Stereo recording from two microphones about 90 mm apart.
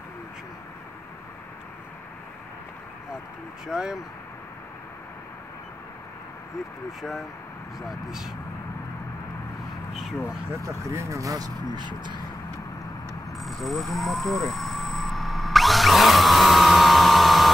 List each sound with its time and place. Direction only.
3.6 s speech: 5° right (ahead or behind)
7.0 s speech: centre (ahead or behind)
10.5 s speech: 35° right (ahead or behind); by 12.2 s 55° right (ahead or behind)
13.4 s vehicle: centre (ahead or behind)